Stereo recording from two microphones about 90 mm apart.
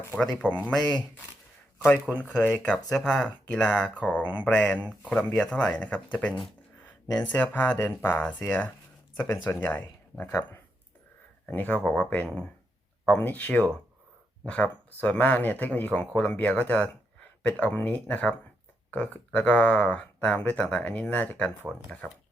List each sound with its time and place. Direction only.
0.4 s speech: 15° left (ahead or behind)
0.8 s speech: 50° left (ahead or behind)
2.1 s speech: 10° right (ahead or behind)
2.4 s speech: 15° left (ahead or behind)
7.3 s speech: 20° left (ahead or behind)